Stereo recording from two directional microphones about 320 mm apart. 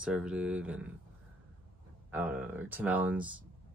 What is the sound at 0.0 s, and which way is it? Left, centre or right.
Speech, centre.